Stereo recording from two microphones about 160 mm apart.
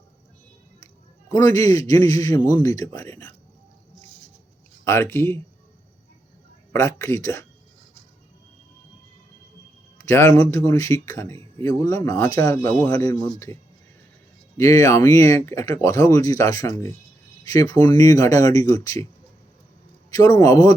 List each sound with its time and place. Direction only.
1.3 s speech: 20° left (ahead or behind)
4.9 s speech: 15° left (ahead or behind)
6.7 s speech: 15° left (ahead or behind)
10.0 s speech: 15° left (ahead or behind)
14.6 s speech: 20° left (ahead or behind)
20.1 s speech: 20° left (ahead or behind)